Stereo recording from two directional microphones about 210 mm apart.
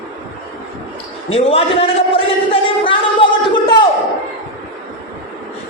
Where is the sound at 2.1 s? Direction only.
25° left (ahead or behind).